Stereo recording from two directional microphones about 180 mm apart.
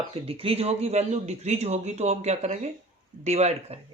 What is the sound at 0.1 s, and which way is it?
Speech, 30° right (ahead or behind).